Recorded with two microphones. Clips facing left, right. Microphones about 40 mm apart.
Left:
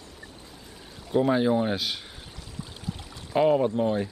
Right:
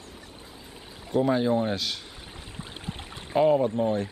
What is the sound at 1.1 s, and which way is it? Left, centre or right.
Speech, centre.